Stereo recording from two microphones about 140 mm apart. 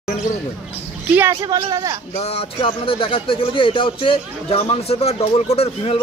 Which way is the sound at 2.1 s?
45° left (ahead or behind).